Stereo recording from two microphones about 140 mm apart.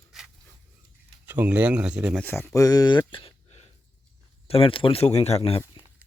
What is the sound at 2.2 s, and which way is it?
Speech, 15° left (ahead or behind).